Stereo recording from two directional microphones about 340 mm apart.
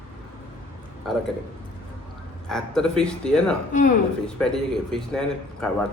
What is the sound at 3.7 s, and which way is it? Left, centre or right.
Speech, left.